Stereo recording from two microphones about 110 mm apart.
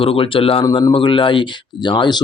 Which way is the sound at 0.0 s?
55° left (ahead or behind).